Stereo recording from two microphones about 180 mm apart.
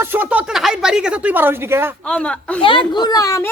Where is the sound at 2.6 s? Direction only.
30° left (ahead or behind).